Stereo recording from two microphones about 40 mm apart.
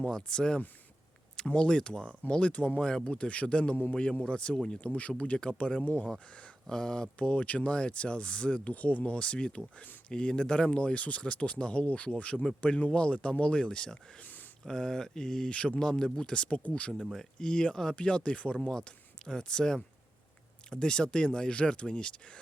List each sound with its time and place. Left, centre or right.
0.0 s speech: left
2.9 s speech: left
7.2 s speech: left
8.7 s speech: left
14.2 s a sound: left
14.6 s speech: centre
15.5 s speech: left
15.8 s speech: centre; by 16.9 s left
17.0 s speech: centre
17.4 s speech: left
17.9 s speech: left